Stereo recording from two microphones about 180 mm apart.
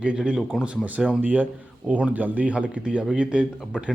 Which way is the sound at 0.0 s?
5° right (ahead or behind).